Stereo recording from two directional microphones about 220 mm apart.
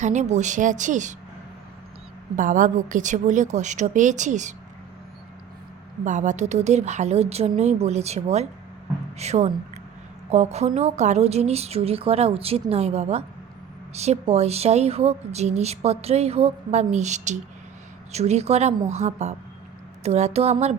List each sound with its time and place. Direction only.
0.0 s a woman's voice: 30° right (ahead or behind)
2.3 s a woman's voice: 35° right (ahead or behind)
6.1 s a woman's voice: 35° right (ahead or behind)